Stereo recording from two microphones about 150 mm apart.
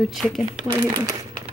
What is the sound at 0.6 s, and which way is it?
Speech, 20° right (ahead or behind).